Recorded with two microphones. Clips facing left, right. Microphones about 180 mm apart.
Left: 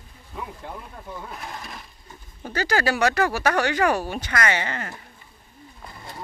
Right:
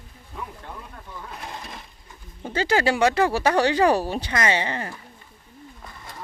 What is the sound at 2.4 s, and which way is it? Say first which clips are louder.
Speech: right 2 dB; 25° right (ahead or behind).